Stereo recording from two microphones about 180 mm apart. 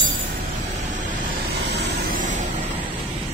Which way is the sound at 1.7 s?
70° right (ahead or behind).